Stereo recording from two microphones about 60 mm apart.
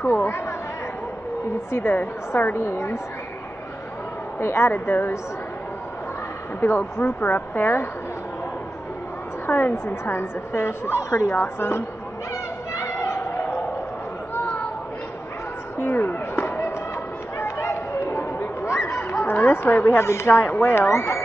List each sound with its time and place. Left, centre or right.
0.0 s speech: left
1.7 s speech: left
4.4 s a woman's voice: left
6.6 s speech: left
9.5 s speech: left
11.3 s speech: left
12.7 s a sound: left
15.8 s a sound: left
17.6 s chatter: left
19.2 s a sound: left
19.5 s speech: left